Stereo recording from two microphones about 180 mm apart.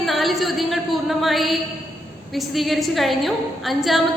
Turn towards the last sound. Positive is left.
turn(degrees=0)  # may be behind; listen again after turning